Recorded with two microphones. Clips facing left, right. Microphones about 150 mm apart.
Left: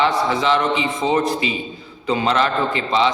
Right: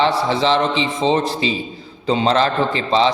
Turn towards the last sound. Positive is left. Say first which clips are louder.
# right 2 dB
turn(degrees=-35)  # may be behind; listen again after turning